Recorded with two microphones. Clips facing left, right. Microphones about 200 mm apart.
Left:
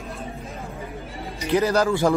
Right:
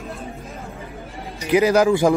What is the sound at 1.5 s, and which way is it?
Speech, 15° right (ahead or behind).